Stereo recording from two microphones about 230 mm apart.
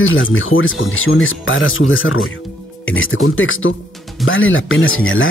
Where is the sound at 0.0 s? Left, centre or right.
Left.